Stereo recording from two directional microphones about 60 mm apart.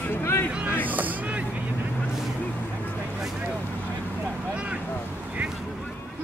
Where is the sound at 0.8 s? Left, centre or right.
Right.